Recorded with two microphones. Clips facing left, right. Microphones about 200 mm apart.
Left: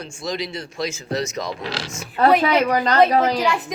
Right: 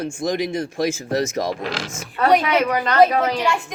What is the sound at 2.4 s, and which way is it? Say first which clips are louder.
Speech: left 2 dB; 35° left (ahead or behind).